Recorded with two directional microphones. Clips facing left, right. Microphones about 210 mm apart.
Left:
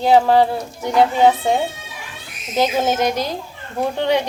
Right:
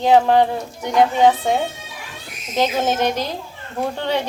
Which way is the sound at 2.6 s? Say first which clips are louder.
Left 1 dB; 10° left (ahead or behind).